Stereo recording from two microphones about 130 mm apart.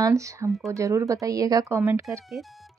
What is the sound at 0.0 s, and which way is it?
Speech, 25° right (ahead or behind).